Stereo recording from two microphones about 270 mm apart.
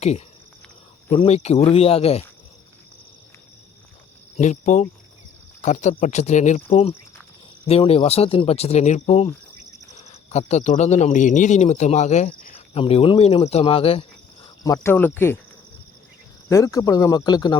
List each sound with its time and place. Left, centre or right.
1.1 s speech: left
4.4 s speech: left; by 15.4 s centre
16.5 s speech: centre